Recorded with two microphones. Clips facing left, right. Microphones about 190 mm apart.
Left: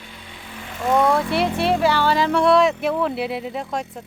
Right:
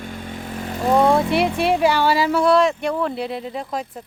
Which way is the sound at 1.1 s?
15° right (ahead or behind).